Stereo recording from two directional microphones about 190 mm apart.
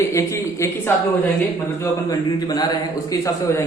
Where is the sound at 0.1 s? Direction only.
15° left (ahead or behind).